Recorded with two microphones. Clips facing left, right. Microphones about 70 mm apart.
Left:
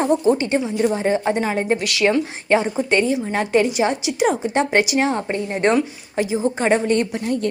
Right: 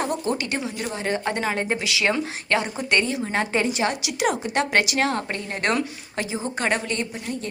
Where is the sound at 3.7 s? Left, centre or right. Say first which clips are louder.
Left 5 dB; left.